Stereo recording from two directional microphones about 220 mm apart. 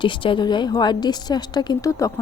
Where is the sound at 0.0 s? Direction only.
20° left (ahead or behind).